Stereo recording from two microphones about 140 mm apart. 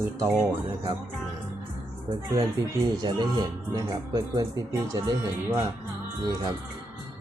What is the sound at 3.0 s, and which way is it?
Speech, 30° right (ahead or behind).